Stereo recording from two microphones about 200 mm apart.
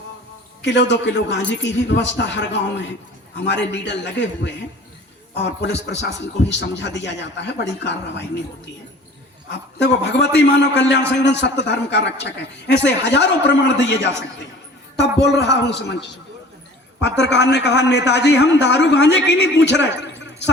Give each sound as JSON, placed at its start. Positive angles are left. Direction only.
{"t": 0.6, "sound": "a man's voice", "side_deg": 60}
{"t": 9.5, "sound": "a man's voice", "side_deg": 60}
{"t": 17.0, "sound": "a man's voice", "side_deg": 60}